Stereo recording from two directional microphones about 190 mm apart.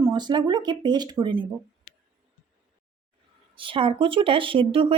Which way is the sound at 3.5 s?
25° right (ahead or behind).